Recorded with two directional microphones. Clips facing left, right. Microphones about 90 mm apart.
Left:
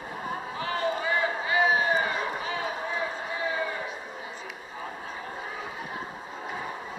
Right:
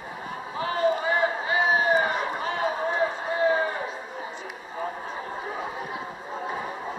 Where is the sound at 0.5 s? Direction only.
35° right (ahead or behind).